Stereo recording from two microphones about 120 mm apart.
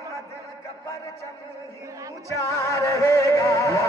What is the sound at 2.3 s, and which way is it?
Music, 25° left (ahead or behind).